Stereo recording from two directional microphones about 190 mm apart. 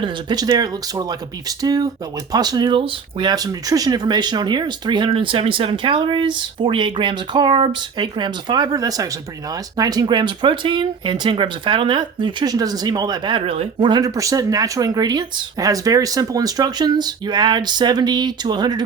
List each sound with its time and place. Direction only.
0.0 s speech: 20° right (ahead or behind)